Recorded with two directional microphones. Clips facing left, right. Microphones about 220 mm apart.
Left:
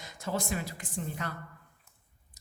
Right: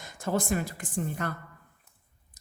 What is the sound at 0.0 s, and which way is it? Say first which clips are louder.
A woman's voice: right 5 dB; 50° right (ahead or behind).